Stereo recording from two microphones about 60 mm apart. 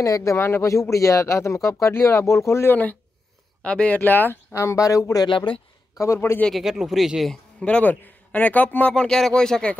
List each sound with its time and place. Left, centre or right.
0.0 s speech: left
2.7 s speech: left
4.0 s speech: left
4.6 s speech: left
5.9 s a man's voice: left
6.5 s speech: centre
7.6 s speech: left
8.9 s speech: centre